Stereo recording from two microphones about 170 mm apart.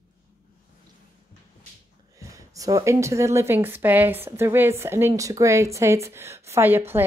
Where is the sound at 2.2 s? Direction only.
20° right (ahead or behind).